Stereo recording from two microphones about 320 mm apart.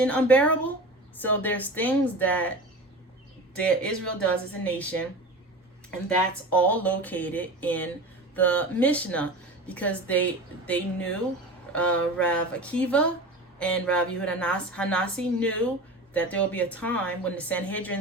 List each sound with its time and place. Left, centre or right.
0.0 s a woman's voice: centre
3.6 s a woman's voice: centre
6.5 s a woman's voice: centre